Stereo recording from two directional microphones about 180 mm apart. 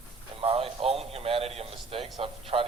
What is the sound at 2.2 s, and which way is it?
Speech, 30° right (ahead or behind).